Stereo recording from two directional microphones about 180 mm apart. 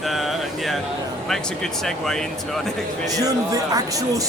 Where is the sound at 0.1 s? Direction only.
Centre (ahead or behind).